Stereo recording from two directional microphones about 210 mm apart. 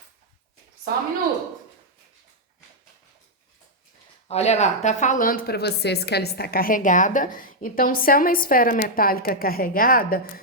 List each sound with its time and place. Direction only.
0.9 s a woman's voice: 45° right (ahead or behind)
4.3 s speech: 30° left (ahead or behind)